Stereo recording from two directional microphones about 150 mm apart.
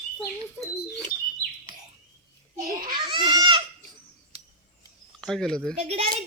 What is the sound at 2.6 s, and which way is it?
Speech, 70° right (ahead or behind).